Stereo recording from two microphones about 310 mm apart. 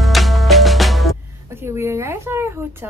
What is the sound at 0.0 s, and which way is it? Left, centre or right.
Music, centre.